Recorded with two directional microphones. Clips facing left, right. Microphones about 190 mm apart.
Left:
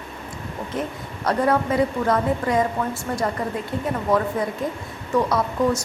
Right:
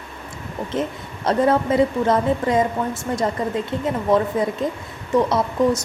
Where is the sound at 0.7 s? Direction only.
25° right (ahead or behind).